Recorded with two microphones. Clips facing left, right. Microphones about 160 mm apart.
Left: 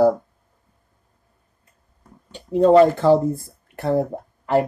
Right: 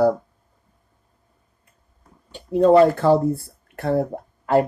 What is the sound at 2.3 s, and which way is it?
Speech, 10° right (ahead or behind).